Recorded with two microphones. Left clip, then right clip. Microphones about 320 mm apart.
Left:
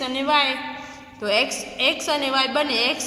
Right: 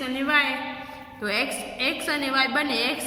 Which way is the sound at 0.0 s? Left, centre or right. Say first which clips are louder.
Left 3 dB; centre.